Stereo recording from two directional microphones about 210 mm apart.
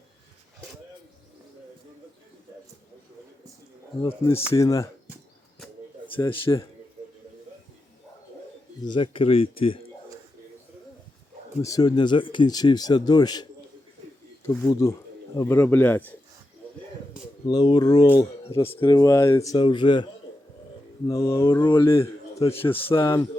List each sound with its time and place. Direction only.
4.0 s speech: 15° left (ahead or behind)
6.1 s speech: 25° left (ahead or behind)
8.8 s speech: 25° left (ahead or behind)
11.6 s speech: 15° left (ahead or behind)
17.4 s speech: 20° left (ahead or behind)
21.1 s a man's voice: 15° left (ahead or behind)